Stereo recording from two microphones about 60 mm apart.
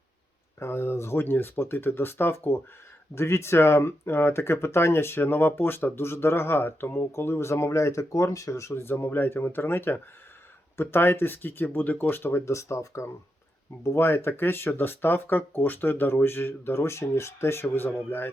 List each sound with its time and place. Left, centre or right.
0.6 s speech: left
3.2 s speech: left
8.7 s speech: left
12.5 s speech: left